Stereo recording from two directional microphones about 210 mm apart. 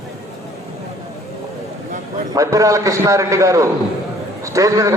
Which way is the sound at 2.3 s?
15° right (ahead or behind).